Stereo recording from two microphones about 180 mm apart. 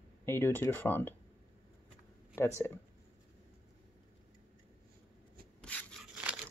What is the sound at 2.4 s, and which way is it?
Speech, 15° left (ahead or behind).